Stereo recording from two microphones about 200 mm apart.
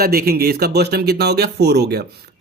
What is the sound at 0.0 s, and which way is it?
Speech, 50° right (ahead or behind).